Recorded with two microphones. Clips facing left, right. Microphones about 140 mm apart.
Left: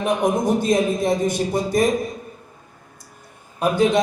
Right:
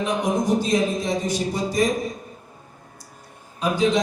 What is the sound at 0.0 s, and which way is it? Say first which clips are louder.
A man's voice: left 3 dB; 55° left (ahead or behind).